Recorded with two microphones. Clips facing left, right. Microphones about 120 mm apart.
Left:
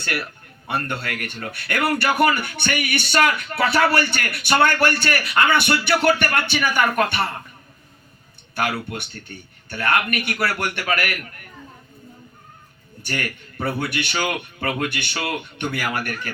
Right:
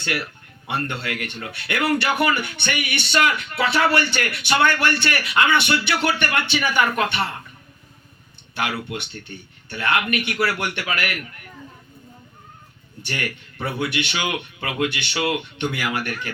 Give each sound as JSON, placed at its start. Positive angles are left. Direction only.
{"t": 0.7, "sound": "speech", "side_deg": 45}
{"t": 8.5, "sound": "speech", "side_deg": 45}
{"t": 13.0, "sound": "speech", "side_deg": 45}